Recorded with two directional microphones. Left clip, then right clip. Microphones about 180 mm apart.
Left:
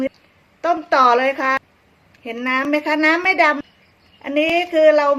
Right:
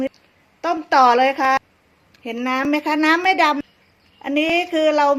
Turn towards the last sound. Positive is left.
turn(degrees=-25)  # may be behind; listen again after turning